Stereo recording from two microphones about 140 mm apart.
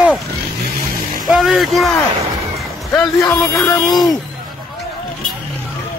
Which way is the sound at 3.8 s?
30° left (ahead or behind).